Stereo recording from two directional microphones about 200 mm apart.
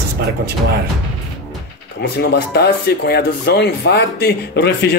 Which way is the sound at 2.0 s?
55° left (ahead or behind).